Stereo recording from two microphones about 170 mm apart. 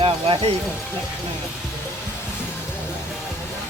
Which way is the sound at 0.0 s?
35° right (ahead or behind).